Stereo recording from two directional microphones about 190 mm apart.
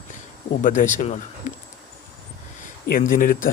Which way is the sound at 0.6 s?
45° left (ahead or behind).